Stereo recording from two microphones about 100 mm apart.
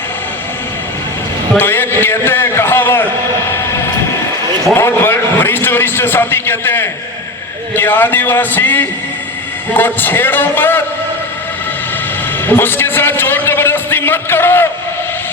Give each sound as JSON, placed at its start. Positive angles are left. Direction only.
{"t": 1.5, "sound": "a man's voice", "side_deg": 20}
{"t": 4.7, "sound": "a man's voice", "side_deg": 20}
{"t": 12.5, "sound": "a man's voice", "side_deg": 20}